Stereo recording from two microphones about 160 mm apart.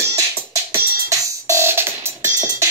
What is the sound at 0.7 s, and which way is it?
Music, 20° right (ahead or behind).